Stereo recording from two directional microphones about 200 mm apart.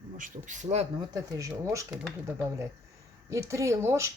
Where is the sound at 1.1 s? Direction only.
15° right (ahead or behind).